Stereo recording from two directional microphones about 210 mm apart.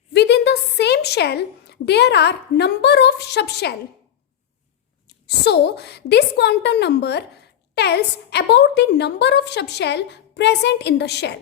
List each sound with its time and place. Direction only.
0.1 s a woman's voice: 55° left (ahead or behind)
5.0 s a woman's voice: 55° left (ahead or behind)